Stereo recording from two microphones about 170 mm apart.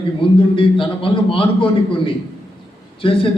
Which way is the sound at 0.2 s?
30° left (ahead or behind).